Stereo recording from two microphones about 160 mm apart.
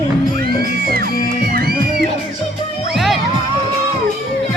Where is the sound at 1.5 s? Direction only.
75° right (ahead or behind).